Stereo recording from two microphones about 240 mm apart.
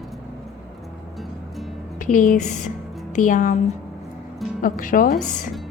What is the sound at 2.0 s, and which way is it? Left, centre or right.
A woman's voice, left.